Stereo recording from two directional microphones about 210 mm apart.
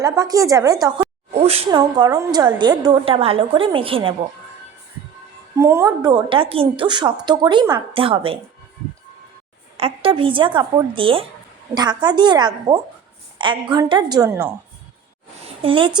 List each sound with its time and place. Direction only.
0.0 s a woman's voice: 15° right (ahead or behind)
5.5 s a woman's voice: 15° right (ahead or behind)
9.7 s a woman's voice: 25° right (ahead or behind)
15.4 s a sound: 25° right (ahead or behind)